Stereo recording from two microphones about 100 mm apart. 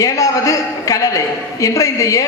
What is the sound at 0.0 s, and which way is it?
A man's voice, 35° left (ahead or behind).